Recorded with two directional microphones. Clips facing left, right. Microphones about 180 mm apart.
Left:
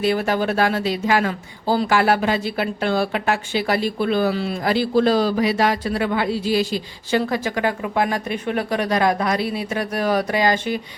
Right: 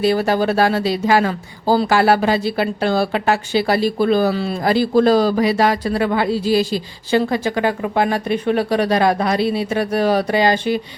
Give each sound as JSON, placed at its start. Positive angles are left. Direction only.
{"t": 0.0, "sound": "speech", "side_deg": -35}